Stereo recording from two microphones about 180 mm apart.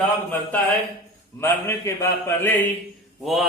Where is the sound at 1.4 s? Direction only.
15° left (ahead or behind).